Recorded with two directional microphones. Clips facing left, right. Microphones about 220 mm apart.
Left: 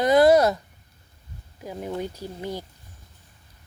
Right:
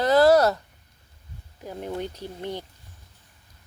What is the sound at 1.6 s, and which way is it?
Speech, 5° left (ahead or behind).